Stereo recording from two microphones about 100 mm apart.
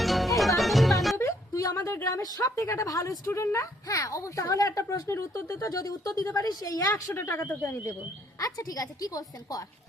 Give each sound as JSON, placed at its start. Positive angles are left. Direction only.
{"t": 0.0, "sound": "music", "side_deg": 0}
{"t": 1.1, "sound": "speech", "side_deg": 25}
{"t": 6.9, "sound": "speech", "side_deg": 20}
{"t": 8.4, "sound": "speech", "side_deg": 35}